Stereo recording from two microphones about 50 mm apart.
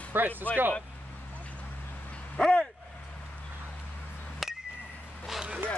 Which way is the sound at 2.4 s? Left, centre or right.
Centre.